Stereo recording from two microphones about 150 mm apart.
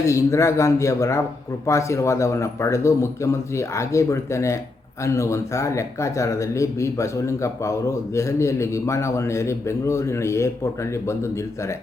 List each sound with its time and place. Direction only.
0.0 s speech: 20° left (ahead or behind)